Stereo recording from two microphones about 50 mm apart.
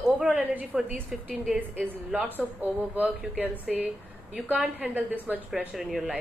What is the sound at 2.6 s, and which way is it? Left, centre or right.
Speech, right.